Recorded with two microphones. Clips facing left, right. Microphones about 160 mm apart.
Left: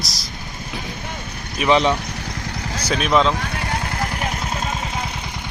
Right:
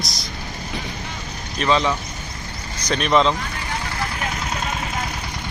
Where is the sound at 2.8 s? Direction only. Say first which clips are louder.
Even; centre (ahead or behind).